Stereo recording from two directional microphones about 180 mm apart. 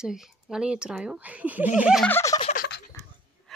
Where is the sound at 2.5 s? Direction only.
55° left (ahead or behind).